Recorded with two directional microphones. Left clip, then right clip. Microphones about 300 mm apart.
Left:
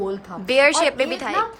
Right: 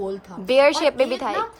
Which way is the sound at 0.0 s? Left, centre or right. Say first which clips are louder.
Left 2 dB; centre.